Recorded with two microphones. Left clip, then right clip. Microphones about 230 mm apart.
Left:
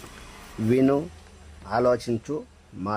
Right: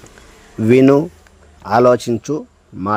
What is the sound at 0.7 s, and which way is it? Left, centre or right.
A man's voice, right.